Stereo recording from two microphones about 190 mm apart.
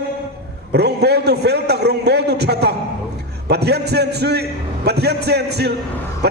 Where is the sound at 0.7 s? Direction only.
60° right (ahead or behind).